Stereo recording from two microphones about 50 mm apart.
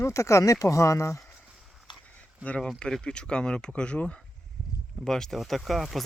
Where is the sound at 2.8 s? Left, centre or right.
Centre.